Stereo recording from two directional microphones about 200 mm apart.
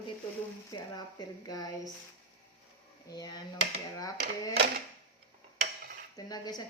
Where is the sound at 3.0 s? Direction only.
20° left (ahead or behind).